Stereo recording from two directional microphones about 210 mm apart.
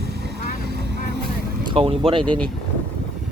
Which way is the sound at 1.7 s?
25° right (ahead or behind).